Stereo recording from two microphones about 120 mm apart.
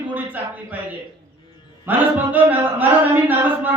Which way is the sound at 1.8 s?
15° right (ahead or behind).